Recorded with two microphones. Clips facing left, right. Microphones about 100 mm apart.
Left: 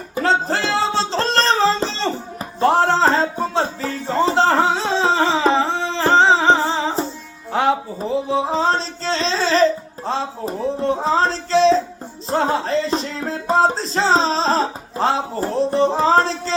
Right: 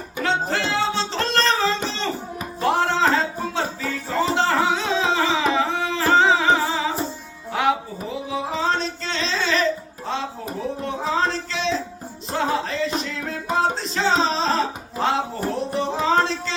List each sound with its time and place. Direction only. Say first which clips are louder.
0.2 s music: left 4 dB; 35° left (ahead or behind)
10.1 s a sound: left 4 dB; 30° left (ahead or behind)
12.3 s music: left 5 dB; 35° left (ahead or behind)